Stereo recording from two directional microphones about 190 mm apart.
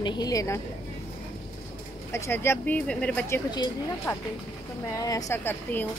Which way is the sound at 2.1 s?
15° left (ahead or behind).